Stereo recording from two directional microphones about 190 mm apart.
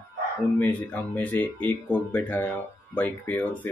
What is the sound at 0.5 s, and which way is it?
Speech, 10° left (ahead or behind).